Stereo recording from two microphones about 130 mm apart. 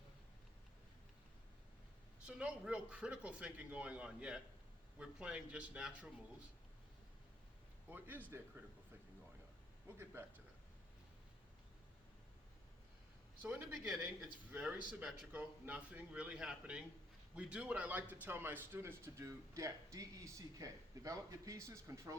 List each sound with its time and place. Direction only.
2.2 s speech: 10° right (ahead or behind)
7.9 s speech: 15° right (ahead or behind)
10.0 s a man's voice: 20° right (ahead or behind)
13.4 s a man's voice: 10° right (ahead or behind)